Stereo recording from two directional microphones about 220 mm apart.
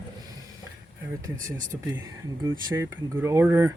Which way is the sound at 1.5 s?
35° right (ahead or behind).